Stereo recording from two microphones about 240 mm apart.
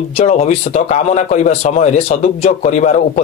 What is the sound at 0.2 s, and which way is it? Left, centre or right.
Speech, left.